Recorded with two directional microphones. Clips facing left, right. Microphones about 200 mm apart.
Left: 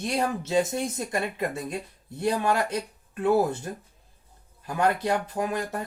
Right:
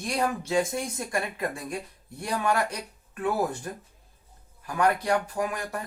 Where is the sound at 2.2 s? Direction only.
25° left (ahead or behind).